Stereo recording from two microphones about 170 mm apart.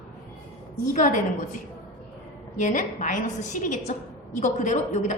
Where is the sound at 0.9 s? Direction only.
45° left (ahead or behind).